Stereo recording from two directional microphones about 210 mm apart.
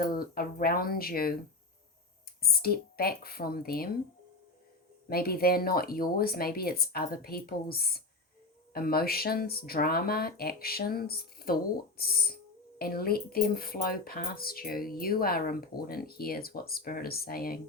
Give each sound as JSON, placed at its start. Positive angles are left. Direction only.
{"t": 0.0, "sound": "speech", "side_deg": 45}
{"t": 2.4, "sound": "speech", "side_deg": 45}
{"t": 5.0, "sound": "speech", "side_deg": 45}